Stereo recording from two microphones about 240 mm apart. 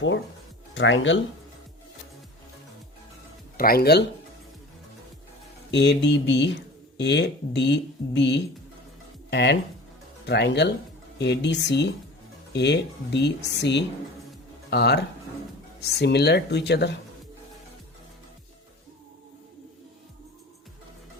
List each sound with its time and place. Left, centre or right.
0.7 s speech: left
3.6 s speech: left
5.7 s speech: left